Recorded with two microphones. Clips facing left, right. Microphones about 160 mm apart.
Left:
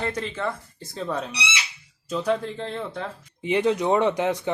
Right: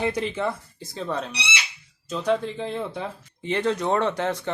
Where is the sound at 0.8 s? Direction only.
Centre (ahead or behind).